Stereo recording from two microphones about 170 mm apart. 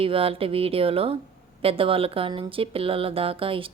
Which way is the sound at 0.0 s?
35° right (ahead or behind).